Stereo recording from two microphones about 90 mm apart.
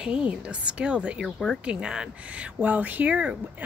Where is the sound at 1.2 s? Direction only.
Centre (ahead or behind).